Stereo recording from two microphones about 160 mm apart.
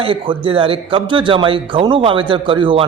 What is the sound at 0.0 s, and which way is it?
Speech, 35° right (ahead or behind).